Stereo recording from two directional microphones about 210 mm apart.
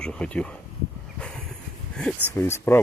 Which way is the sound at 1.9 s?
5° left (ahead or behind).